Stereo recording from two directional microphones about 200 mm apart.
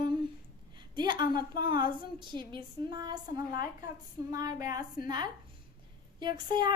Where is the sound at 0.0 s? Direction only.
20° right (ahead or behind).